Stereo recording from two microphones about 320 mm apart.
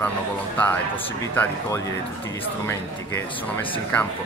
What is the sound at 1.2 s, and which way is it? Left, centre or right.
Speech, centre.